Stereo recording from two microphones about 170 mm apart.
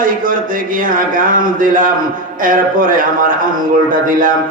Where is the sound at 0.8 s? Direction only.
55° right (ahead or behind).